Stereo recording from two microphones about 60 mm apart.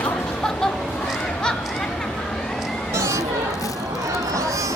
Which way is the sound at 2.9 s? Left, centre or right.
Right.